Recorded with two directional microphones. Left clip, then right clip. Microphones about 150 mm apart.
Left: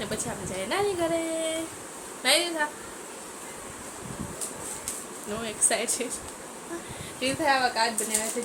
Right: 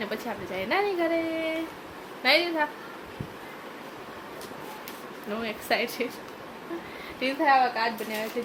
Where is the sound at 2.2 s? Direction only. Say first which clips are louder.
Right 1 dB; 30° right (ahead or behind).